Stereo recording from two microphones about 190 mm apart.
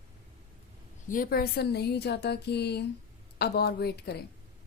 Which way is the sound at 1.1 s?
50° left (ahead or behind).